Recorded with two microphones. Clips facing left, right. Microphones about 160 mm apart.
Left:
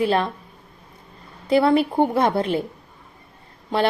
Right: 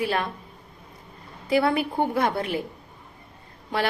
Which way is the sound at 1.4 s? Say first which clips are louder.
Left 5 dB; 30° left (ahead or behind).